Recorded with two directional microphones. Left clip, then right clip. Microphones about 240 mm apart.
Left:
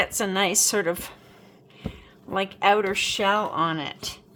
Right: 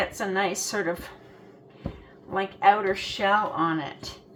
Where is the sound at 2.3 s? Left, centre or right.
Left.